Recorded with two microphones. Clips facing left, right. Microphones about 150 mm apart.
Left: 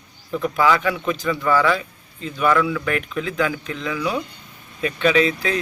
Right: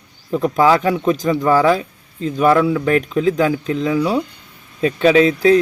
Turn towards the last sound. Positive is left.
turn(degrees=-35)  # may be behind; listen again after turning